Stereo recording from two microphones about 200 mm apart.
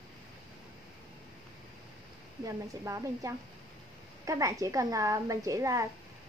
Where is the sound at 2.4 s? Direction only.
15° right (ahead or behind).